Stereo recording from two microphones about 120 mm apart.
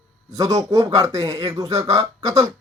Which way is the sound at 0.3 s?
30° right (ahead or behind).